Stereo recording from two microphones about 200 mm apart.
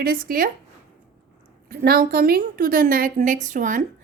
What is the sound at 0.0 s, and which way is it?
Speech, 45° right (ahead or behind).